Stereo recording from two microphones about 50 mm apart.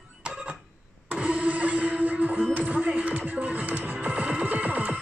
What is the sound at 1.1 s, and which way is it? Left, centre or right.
Music, right.